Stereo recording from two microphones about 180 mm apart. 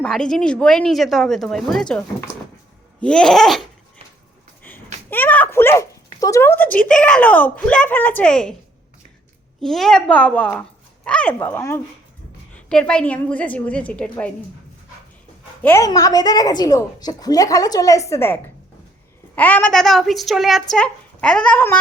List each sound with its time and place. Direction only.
0.0 s speech: 5° left (ahead or behind)
5.1 s a woman's voice: 10° left (ahead or behind)
9.6 s a woman's voice: centre (ahead or behind)
15.6 s a woman's voice: 15° left (ahead or behind)
19.4 s speech: 10° left (ahead or behind)